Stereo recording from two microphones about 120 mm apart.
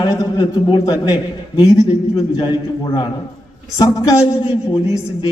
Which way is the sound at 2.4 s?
40° left (ahead or behind).